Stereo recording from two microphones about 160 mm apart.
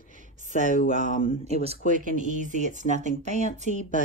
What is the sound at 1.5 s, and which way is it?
Speech, 40° right (ahead or behind).